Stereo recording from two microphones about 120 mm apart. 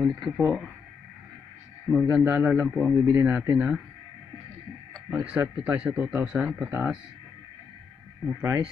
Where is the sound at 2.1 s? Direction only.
10° right (ahead or behind).